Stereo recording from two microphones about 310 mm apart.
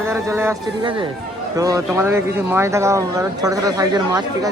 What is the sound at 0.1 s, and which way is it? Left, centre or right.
Speech, centre.